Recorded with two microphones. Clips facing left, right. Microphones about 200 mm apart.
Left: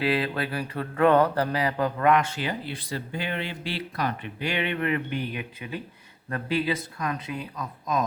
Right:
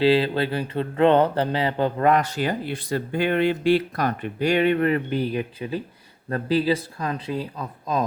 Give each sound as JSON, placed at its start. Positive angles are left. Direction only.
{"t": 0.0, "sound": "speech", "side_deg": -30}